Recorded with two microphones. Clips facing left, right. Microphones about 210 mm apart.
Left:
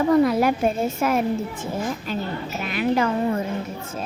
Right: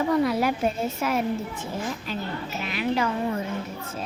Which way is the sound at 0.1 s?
50° left (ahead or behind).